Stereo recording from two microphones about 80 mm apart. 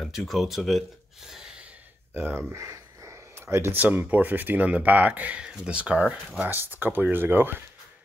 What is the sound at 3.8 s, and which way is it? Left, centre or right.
Speech, right.